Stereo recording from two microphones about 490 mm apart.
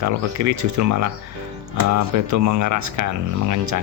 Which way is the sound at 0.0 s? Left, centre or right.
Right.